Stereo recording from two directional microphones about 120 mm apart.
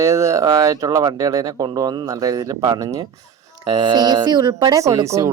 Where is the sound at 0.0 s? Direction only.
25° right (ahead or behind).